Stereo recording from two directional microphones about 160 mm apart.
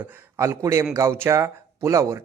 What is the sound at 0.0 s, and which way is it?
A man's voice, 15° right (ahead or behind).